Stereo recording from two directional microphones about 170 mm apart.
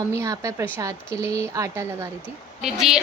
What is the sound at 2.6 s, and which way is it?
Speech, 5° right (ahead or behind).